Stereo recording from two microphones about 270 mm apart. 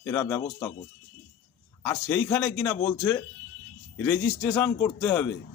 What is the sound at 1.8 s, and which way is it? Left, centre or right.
A man's voice, centre.